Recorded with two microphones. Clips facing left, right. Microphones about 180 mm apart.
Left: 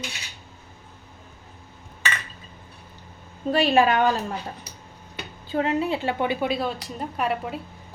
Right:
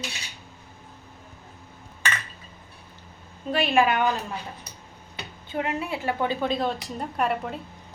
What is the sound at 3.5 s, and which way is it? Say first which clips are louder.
Speech: left 3 dB; 35° left (ahead or behind).